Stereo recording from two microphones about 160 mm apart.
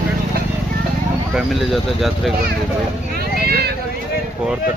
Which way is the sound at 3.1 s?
80° right.